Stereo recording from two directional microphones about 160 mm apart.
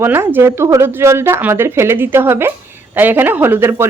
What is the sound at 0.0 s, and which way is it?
A woman's voice, 15° right (ahead or behind).